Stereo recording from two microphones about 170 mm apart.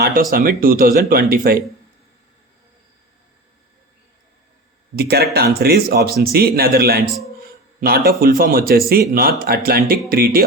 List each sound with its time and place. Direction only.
0.0 s a man's voice: 60° right (ahead or behind)
4.9 s a man's voice: 65° right (ahead or behind)